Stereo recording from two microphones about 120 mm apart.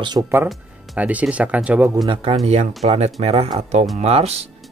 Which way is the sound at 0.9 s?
10° right (ahead or behind).